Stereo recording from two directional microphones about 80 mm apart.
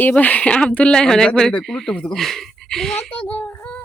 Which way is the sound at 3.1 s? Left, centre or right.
Centre.